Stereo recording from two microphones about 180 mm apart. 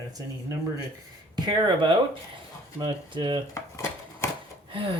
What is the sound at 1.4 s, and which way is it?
Speech, 25° right (ahead or behind).